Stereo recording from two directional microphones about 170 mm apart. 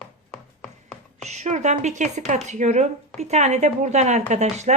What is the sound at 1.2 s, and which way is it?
Speech, 40° right (ahead or behind).